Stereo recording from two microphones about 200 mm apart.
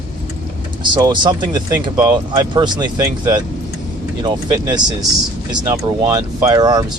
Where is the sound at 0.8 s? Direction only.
20° right (ahead or behind).